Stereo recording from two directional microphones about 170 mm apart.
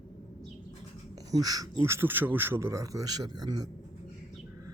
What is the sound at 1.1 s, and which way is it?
A man's voice, 20° right (ahead or behind).